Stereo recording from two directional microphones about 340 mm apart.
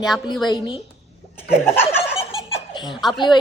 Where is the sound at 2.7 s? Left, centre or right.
Centre.